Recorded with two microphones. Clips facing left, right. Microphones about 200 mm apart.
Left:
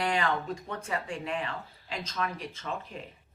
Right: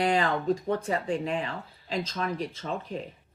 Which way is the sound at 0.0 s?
35° right (ahead or behind).